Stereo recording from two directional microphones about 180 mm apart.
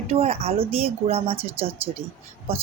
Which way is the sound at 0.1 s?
35° right (ahead or behind).